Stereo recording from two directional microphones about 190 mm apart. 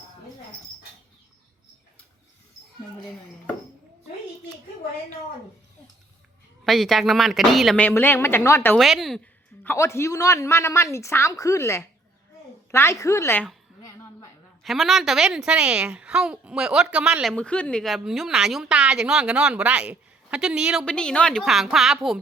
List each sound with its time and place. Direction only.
6.7 s a woman's voice: centre (ahead or behind)
8.8 s a woman's voice: centre (ahead or behind)
9.6 s a woman's voice: 15° left (ahead or behind); by 22.2 s centre (ahead or behind)